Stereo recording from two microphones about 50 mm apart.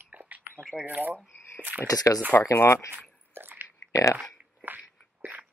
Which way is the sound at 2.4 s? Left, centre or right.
Left.